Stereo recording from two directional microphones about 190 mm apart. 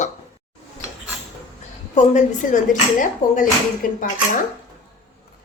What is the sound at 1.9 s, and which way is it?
A woman's voice, 40° left (ahead or behind).